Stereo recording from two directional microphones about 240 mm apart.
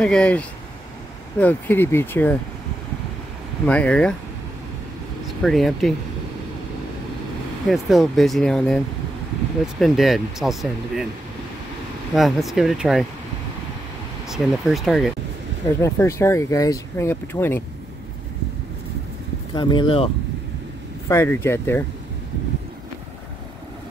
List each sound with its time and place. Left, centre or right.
0.0 s speech: centre
3.6 s speech: centre
5.4 s speech: centre
7.6 s speech: centre
12.1 s speech: centre
14.3 s speech: centre
15.8 s speech: centre
19.5 s speech: centre
21.1 s speech: centre